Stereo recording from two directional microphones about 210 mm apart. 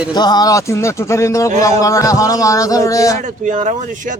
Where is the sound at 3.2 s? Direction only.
35° right (ahead or behind).